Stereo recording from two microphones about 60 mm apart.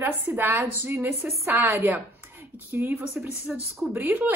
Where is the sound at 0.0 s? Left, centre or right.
Right.